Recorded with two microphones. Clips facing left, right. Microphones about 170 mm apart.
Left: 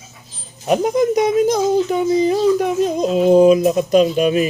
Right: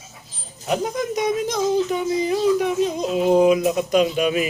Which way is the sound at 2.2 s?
40° left (ahead or behind).